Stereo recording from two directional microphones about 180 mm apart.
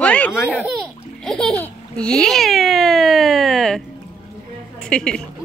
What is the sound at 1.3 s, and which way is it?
Speech, 5° left (ahead or behind).